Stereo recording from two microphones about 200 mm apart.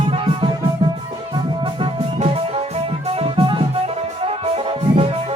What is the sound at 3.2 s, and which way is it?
Music, 25° right (ahead or behind).